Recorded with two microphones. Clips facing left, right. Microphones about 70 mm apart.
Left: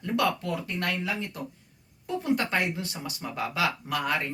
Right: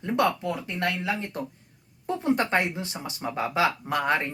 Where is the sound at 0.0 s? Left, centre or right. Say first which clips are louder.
Right 2 dB; right.